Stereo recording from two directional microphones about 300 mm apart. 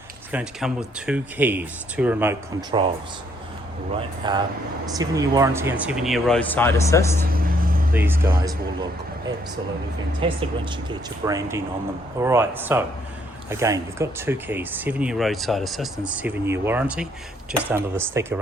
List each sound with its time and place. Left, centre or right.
0.3 s speech: centre
4.2 s speech: centre
7.3 s vehicle: right
7.9 s speech: centre
10.2 s speech: centre